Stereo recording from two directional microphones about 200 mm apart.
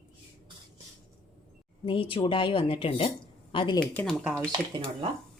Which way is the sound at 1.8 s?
25° left (ahead or behind).